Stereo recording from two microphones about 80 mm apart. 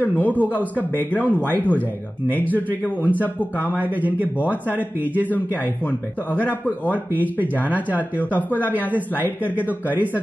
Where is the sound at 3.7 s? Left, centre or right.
Right.